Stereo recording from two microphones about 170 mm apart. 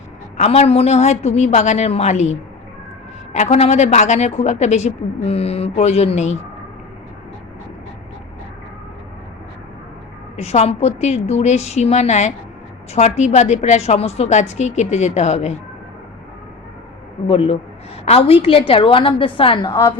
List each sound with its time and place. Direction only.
0.3 s a woman's voice: 40° left (ahead or behind)
3.3 s a woman's voice: 40° left (ahead or behind)
10.3 s a woman's voice: 40° left (ahead or behind)
17.2 s a woman's voice: 35° left (ahead or behind)